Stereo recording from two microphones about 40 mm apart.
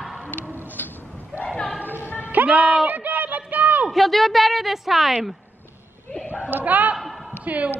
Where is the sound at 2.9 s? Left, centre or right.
Right.